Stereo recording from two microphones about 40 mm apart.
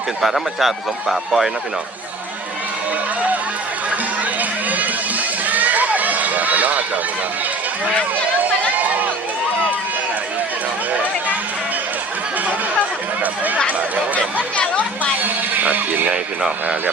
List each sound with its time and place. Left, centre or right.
0.2 s a man's voice: centre
4.4 s run: right
8.7 s run: right
15.2 s speech: right